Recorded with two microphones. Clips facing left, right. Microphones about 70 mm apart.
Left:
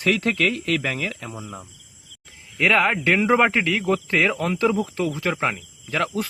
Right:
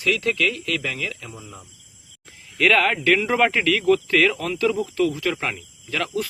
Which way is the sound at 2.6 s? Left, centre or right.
Centre.